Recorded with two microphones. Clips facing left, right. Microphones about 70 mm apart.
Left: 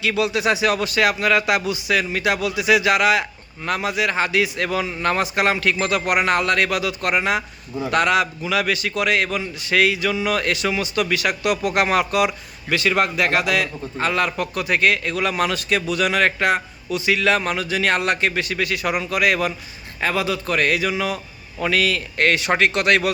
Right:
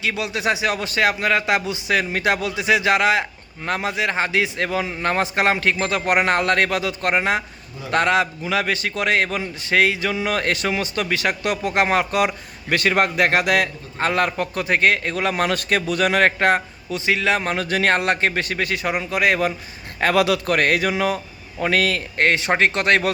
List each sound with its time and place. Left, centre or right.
0.0 s a man's voice: right
17.6 s a sound: right
17.9 s a man's voice: right
20.0 s a man's voice: right
20.6 s a sound: right
21.6 s a man's voice: right